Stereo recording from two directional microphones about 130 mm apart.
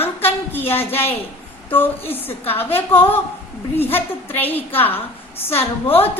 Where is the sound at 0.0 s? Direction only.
15° left (ahead or behind).